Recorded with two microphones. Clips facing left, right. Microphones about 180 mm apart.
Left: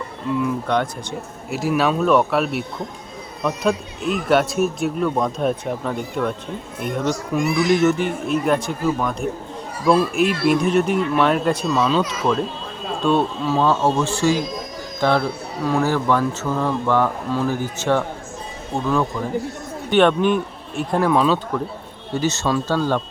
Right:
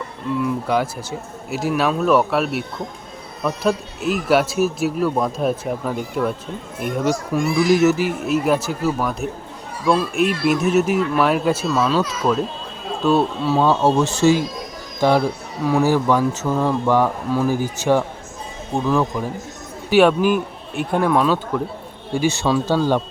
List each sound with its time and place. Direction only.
0.4 s speech: 5° right (ahead or behind)
15.6 s speech: 10° right (ahead or behind)